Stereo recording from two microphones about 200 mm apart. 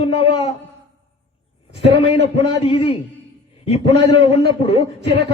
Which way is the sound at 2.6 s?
30° left (ahead or behind).